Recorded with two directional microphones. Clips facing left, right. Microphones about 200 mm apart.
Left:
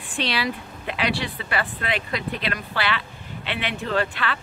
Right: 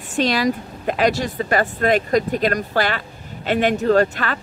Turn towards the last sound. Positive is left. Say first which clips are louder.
# right 7 dB
turn(degrees=-45)  # may be behind; listen again after turning